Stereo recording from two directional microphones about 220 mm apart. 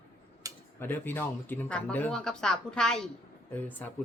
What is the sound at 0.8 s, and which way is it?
Speech, 10° left (ahead or behind).